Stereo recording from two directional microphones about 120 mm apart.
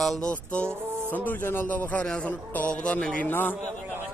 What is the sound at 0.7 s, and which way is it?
Speech, 20° right (ahead or behind).